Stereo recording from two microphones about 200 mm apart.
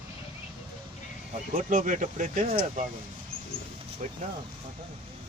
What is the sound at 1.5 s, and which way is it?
Speech, 40° right (ahead or behind).